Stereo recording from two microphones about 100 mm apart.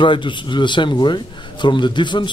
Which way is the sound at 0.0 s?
55° left (ahead or behind).